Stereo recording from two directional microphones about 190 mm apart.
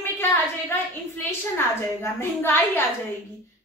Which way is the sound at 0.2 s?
15° left (ahead or behind).